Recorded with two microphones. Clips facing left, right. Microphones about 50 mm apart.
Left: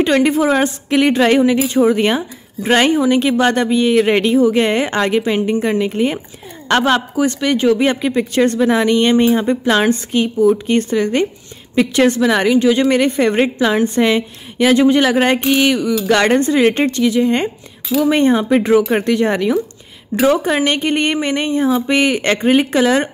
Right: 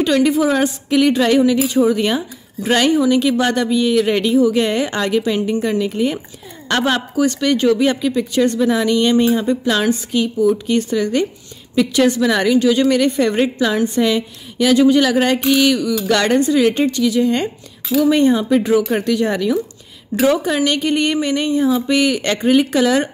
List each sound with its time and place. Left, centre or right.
0.0 s speech: left
6.7 s a woman's voice: left
7.8 s speech: left
12.2 s a woman's voice: left